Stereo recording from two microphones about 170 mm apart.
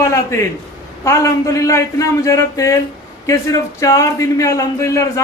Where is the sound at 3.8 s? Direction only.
20° left (ahead or behind).